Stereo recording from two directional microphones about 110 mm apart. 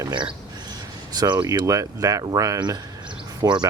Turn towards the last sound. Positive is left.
turn(degrees=-40)  # may be behind; listen again after turning